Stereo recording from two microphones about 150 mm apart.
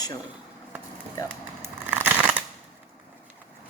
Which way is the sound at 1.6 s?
15° right (ahead or behind).